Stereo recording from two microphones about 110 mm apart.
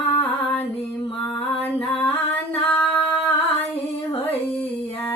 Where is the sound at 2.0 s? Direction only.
15° left (ahead or behind).